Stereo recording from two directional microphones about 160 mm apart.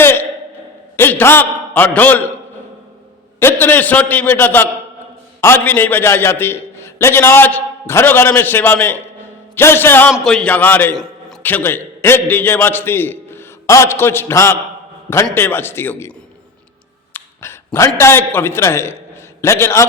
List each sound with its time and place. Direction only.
0.0 s a sound: 15° left (ahead or behind)
0.9 s a man's voice: 15° left (ahead or behind)
3.4 s a man's voice: 10° left (ahead or behind)
17.2 s dog: 15° left (ahead or behind)
17.7 s a man's voice: 15° left (ahead or behind)